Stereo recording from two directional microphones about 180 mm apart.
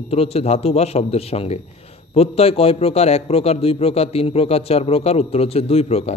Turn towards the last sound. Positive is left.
turn(degrees=35)  # may be behind; listen again after turning